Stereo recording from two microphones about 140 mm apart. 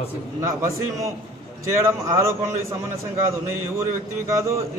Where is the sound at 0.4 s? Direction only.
20° right (ahead or behind).